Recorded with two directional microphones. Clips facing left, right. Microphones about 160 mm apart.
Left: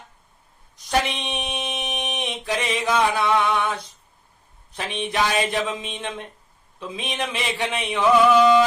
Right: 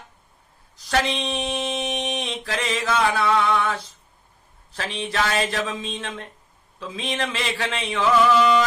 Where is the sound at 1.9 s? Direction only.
15° left (ahead or behind).